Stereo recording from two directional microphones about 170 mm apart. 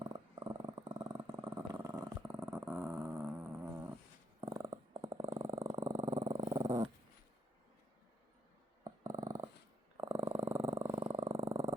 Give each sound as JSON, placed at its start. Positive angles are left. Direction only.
{"t": 0.0, "sound": "purr", "side_deg": -25}
{"t": 4.4, "sound": "dog", "side_deg": -20}
{"t": 8.8, "sound": "dog", "side_deg": -20}
{"t": 10.0, "sound": "purr", "side_deg": -15}